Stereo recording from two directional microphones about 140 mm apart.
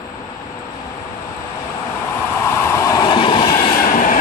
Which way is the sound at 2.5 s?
20° left (ahead or behind).